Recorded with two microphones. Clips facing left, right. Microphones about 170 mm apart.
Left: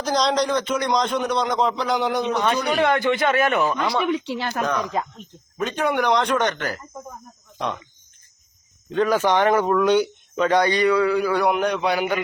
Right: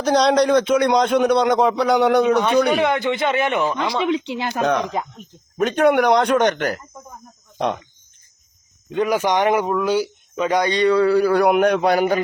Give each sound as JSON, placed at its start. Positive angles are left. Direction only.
{"t": 0.0, "sound": "a man's voice", "side_deg": -60}
{"t": 2.7, "sound": "a man's voice", "side_deg": -20}
{"t": 5.5, "sound": "a man's voice", "side_deg": -65}
{"t": 7.6, "sound": "a man's voice", "side_deg": -65}
{"t": 8.9, "sound": "speech", "side_deg": -15}
{"t": 11.5, "sound": "a man's voice", "side_deg": -55}